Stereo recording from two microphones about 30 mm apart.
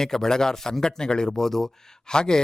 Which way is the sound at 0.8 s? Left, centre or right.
Left.